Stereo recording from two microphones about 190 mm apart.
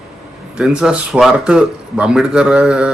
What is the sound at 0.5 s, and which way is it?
A man's voice, 5° right (ahead or behind).